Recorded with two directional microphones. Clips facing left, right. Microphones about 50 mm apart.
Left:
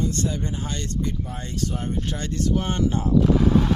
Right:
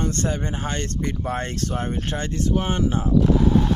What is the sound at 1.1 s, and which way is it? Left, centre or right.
Speech, right.